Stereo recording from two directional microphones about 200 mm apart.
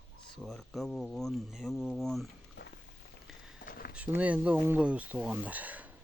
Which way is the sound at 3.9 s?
5° right (ahead or behind).